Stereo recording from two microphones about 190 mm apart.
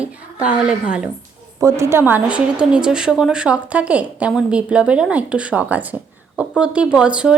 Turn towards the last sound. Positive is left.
turn(degrees=-5)  # may be behind; listen again after turning